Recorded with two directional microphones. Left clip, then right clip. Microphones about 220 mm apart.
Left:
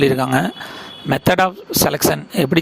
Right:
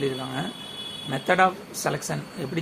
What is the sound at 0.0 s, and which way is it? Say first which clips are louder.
Speech: left 13 dB; 50° left (ahead or behind).